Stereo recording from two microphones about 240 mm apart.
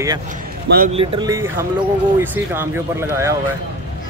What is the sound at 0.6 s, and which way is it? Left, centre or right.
Speech, right.